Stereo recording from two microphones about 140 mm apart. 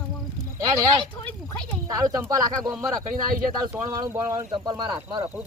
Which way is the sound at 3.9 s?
25° right (ahead or behind).